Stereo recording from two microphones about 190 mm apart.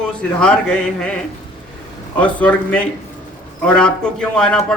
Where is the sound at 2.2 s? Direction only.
5° left (ahead or behind).